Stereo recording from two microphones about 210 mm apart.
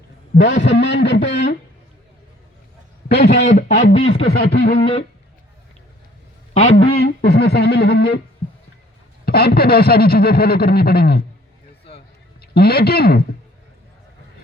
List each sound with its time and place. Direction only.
0.3 s a man's voice: 60° left (ahead or behind)
3.2 s speech: 35° left (ahead or behind)
4.3 s speech: 50° left (ahead or behind)
6.5 s speech: 30° left (ahead or behind)
6.9 s speech: 50° left (ahead or behind)
9.2 s speech: 45° left (ahead or behind)
12.4 s speech: 50° left (ahead or behind)